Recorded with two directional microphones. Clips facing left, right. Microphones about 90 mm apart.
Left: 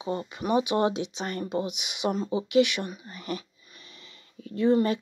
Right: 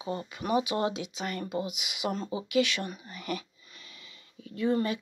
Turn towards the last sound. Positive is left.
turn(degrees=35)  # may be behind; listen again after turning